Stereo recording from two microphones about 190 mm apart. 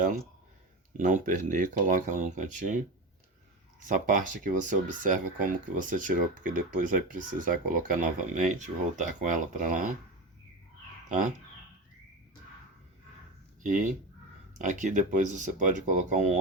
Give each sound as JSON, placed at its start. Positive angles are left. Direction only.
{"t": 0.9, "sound": "speech", "side_deg": -45}
{"t": 13.6, "sound": "speech", "side_deg": -45}